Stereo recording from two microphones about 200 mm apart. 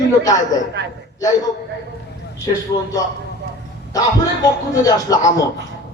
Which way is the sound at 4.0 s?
15° left (ahead or behind).